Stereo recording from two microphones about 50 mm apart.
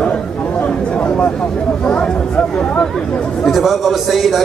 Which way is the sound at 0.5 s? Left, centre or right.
Left.